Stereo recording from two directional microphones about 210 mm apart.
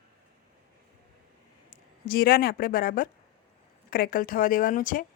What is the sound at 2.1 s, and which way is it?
Speech, 45° left (ahead or behind).